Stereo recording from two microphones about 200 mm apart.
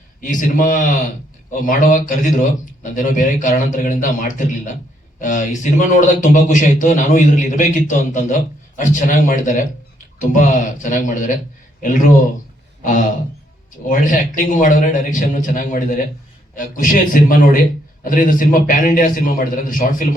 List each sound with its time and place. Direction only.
0.2 s a man's voice: 40° left (ahead or behind)